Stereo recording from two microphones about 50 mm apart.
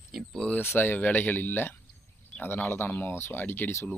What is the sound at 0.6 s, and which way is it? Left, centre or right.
Speech, left.